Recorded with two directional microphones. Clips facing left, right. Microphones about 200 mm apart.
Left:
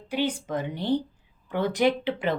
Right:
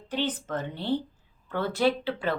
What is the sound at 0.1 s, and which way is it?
Speech, 10° left (ahead or behind).